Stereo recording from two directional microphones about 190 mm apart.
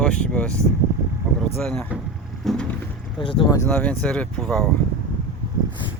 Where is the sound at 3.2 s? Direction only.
25° left (ahead or behind).